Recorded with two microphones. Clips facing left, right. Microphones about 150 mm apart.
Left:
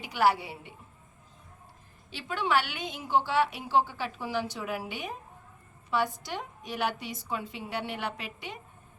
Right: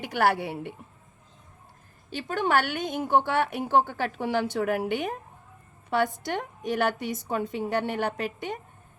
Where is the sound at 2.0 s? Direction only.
45° right (ahead or behind).